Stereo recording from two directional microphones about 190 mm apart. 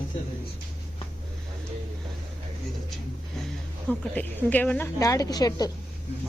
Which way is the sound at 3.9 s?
10° left (ahead or behind).